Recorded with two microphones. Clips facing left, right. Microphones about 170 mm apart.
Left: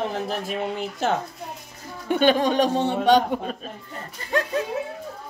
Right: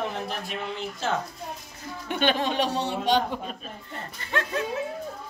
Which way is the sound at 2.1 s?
45° left (ahead or behind).